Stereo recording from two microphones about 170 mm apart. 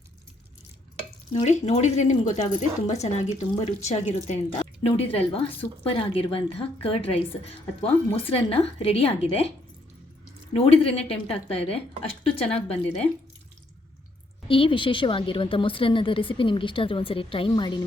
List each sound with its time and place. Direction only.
1.3 s a woman's voice: 40° left (ahead or behind)
10.5 s a woman's voice: 35° left (ahead or behind)
14.4 s a woman's voice: 30° left (ahead or behind)